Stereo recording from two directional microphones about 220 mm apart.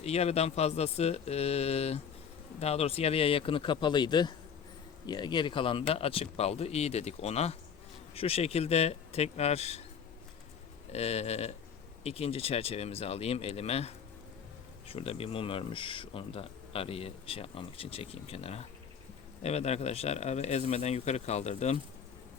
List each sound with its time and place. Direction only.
0.0 s speech: 30° left (ahead or behind)
10.9 s speech: 30° left (ahead or behind)